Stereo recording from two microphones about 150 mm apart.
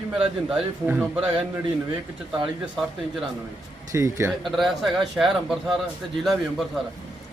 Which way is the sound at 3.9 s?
20° right (ahead or behind).